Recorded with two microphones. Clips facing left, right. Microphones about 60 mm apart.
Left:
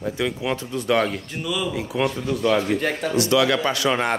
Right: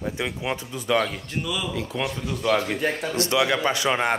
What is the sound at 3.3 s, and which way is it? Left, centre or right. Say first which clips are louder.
Speech: left 2 dB; centre.